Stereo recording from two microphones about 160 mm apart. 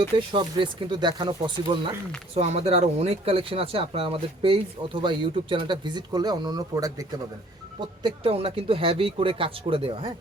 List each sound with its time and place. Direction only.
0.0 s speech: 30° right (ahead or behind)
7.8 s speech: 30° right (ahead or behind)